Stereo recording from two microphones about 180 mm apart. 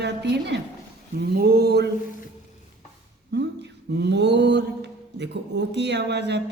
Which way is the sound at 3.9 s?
70° right (ahead or behind).